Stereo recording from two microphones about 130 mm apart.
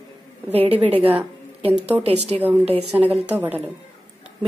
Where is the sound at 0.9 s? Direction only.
45° right (ahead or behind).